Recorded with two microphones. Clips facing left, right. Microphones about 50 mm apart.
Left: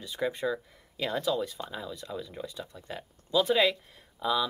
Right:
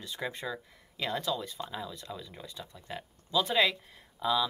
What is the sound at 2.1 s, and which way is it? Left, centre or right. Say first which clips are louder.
Speech: left 5 dB; centre.